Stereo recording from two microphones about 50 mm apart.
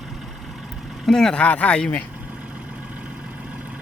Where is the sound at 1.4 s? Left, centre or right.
Left.